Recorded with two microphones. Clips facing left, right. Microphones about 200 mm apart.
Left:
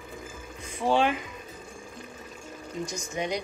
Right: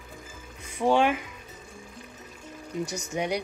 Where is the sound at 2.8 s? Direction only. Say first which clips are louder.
Right 1 dB; 70° right (ahead or behind).